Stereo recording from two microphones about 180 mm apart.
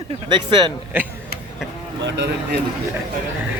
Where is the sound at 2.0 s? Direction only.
75° right (ahead or behind).